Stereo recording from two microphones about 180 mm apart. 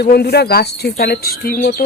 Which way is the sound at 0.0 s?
65° left (ahead or behind).